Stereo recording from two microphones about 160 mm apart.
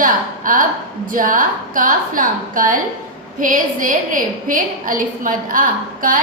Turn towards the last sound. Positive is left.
turn(degrees=-60)  # may be behind; listen again after turning